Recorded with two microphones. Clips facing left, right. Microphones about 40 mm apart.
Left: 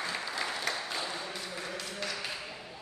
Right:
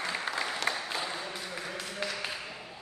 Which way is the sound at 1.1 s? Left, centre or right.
Centre.